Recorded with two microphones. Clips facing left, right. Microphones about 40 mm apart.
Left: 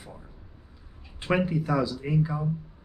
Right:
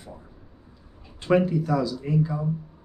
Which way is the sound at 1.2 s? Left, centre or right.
Centre.